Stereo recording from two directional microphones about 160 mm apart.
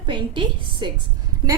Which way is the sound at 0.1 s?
30° right (ahead or behind).